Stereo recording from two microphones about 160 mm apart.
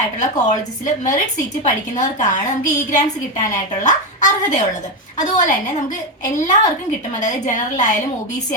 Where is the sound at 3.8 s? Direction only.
50° left (ahead or behind).